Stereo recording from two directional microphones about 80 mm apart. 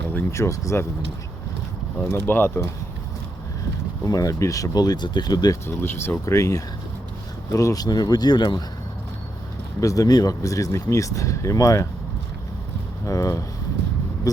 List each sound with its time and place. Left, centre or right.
0.3 s speech: left
2.1 s speech: left
4.0 s speech: left
5.6 s speech: left
6.2 s speech: left
9.8 s speech: left
13.1 s speech: left